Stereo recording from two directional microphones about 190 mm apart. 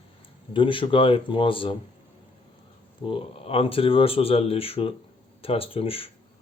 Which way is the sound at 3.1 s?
30° left (ahead or behind).